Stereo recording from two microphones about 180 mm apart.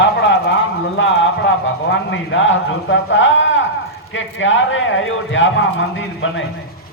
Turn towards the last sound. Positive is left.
turn(degrees=90)